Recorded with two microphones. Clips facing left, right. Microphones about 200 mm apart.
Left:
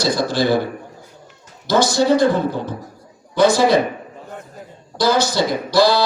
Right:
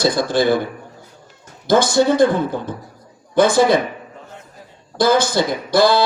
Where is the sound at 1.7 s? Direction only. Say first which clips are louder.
Right 1 dB; 50° right (ahead or behind).